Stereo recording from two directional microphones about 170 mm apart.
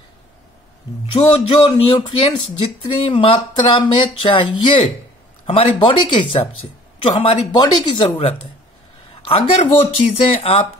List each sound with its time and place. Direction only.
1.1 s speech: 30° left (ahead or behind)